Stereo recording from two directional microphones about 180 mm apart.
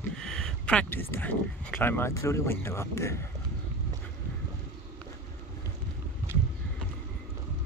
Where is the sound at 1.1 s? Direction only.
10° left (ahead or behind).